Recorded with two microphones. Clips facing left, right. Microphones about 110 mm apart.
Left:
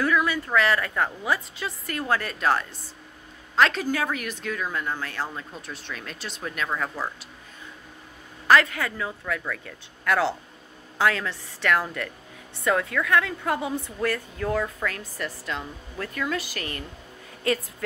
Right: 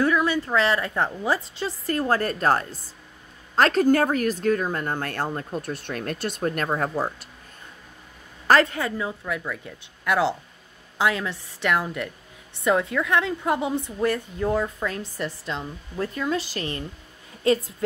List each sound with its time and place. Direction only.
0.0 s a woman's voice: 25° right (ahead or behind)
8.5 s a woman's voice: 35° right (ahead or behind)